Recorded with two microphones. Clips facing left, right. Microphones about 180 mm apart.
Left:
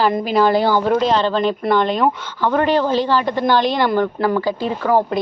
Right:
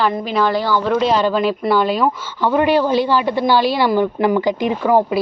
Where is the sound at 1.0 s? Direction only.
10° right (ahead or behind).